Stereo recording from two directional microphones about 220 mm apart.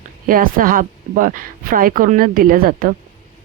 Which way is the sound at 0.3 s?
40° right (ahead or behind).